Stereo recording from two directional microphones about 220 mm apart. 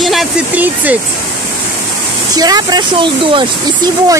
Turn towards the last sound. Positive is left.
turn(degrees=-20)  # may be behind; listen again after turning